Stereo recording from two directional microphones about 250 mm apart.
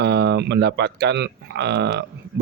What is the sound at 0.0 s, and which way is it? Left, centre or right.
Speech, right.